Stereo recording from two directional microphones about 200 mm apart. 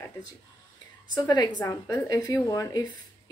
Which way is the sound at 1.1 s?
20° left (ahead or behind).